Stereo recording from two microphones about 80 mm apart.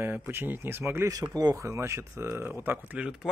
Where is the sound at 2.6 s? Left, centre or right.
Right.